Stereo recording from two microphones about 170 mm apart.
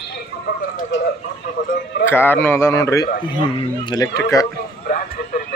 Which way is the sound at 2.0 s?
15° left (ahead or behind).